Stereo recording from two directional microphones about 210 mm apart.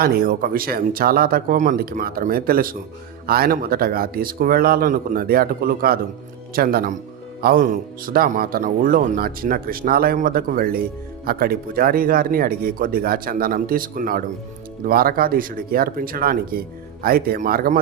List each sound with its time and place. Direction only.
0.0 s a man's voice: 45° right (ahead or behind)